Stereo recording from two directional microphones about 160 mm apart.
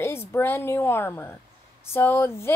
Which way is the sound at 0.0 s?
15° left (ahead or behind).